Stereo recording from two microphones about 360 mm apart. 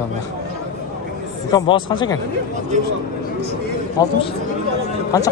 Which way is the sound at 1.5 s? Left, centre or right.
Centre.